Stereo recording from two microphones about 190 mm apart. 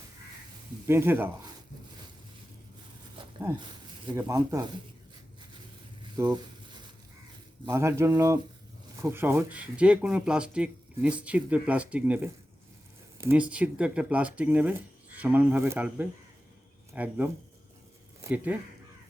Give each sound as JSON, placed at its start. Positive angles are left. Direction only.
{"t": 0.9, "sound": "speech", "side_deg": -10}
{"t": 3.2, "sound": "a sound", "side_deg": -25}
{"t": 4.2, "sound": "speech", "side_deg": -15}
{"t": 6.1, "sound": "speech", "side_deg": -20}
{"t": 7.6, "sound": "speech", "side_deg": -15}